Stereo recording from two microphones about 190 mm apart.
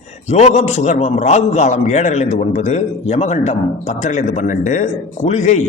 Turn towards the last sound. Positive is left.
turn(degrees=40)  # may be behind; listen again after turning